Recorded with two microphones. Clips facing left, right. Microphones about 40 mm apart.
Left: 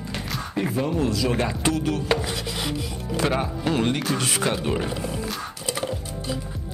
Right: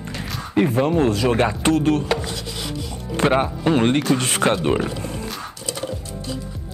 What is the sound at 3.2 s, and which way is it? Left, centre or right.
Speech, right.